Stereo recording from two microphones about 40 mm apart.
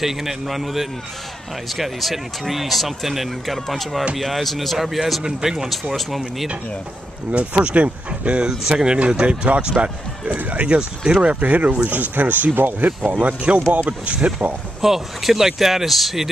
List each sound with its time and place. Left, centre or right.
0.0 s speech: centre
7.3 s speech: right
8.5 s speech: centre
8.8 s speech: right
10.2 s speech: right
12.5 s speech: right
13.0 s speech: right
14.8 s speech: centre